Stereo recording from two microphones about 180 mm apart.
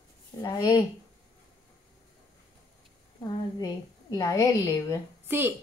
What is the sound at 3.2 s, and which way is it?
A woman's voice, 20° left (ahead or behind).